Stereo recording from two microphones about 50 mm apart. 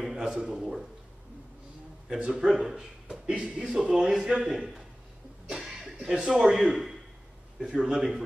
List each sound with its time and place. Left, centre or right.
0.0 s a sound: centre
2.0 s speech: centre
5.5 s chuckle: centre
6.4 s speech: centre